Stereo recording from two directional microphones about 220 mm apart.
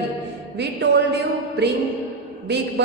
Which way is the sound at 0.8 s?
50° right (ahead or behind).